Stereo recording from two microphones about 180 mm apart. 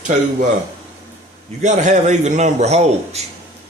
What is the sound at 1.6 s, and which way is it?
Speech, 40° right (ahead or behind).